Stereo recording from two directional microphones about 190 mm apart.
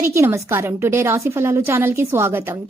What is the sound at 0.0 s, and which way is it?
A woman's voice, 10° right (ahead or behind).